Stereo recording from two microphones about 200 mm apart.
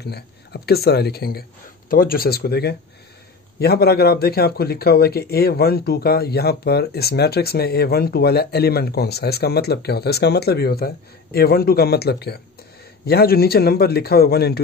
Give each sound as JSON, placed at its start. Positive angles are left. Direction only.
{"t": 0.0, "sound": "speech", "side_deg": 55}